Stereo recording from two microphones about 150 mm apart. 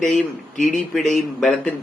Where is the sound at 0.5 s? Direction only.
60° left (ahead or behind).